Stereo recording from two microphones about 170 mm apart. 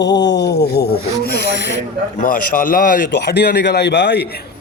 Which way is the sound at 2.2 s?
55° left (ahead or behind).